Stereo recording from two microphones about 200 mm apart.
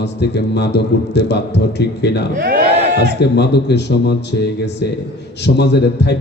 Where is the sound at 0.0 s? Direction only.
60° left (ahead or behind).